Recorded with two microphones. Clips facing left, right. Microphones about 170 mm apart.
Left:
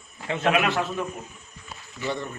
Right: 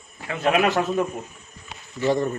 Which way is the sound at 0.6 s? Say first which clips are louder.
Right 7 dB; 40° right (ahead or behind).